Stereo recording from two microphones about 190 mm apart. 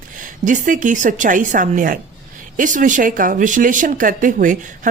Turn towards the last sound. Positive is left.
turn(degrees=-45)  # may be behind; listen again after turning